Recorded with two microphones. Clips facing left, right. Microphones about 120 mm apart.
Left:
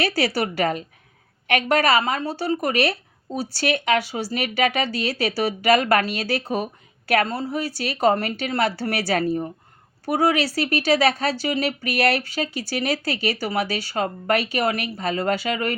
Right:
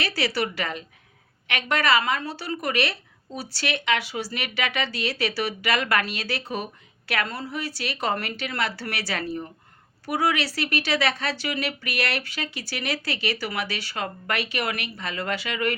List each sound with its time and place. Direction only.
0.2 s a woman's voice: 40° left (ahead or behind)